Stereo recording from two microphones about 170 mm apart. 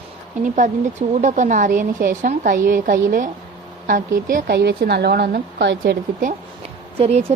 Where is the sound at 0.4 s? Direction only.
45° right (ahead or behind).